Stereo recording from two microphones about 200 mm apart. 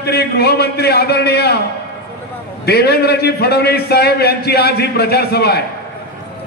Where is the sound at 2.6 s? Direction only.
55° left (ahead or behind).